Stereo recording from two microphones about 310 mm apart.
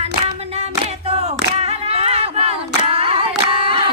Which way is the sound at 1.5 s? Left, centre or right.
Centre.